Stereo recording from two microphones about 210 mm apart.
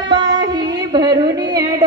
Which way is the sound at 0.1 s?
20° right (ahead or behind).